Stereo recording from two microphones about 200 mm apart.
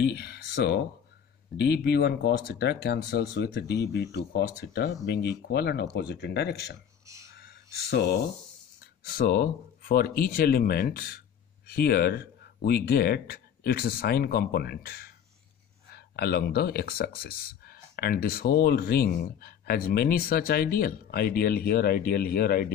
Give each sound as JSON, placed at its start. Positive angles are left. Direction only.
{"t": 0.0, "sound": "speech", "side_deg": 50}
{"t": 7.3, "sound": "a sound", "side_deg": 55}
{"t": 9.0, "sound": "speech", "side_deg": 50}